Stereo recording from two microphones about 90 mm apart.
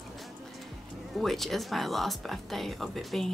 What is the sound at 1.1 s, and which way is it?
Speech, centre (ahead or behind).